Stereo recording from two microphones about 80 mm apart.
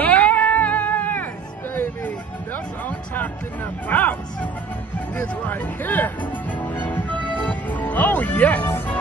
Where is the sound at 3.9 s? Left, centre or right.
Left.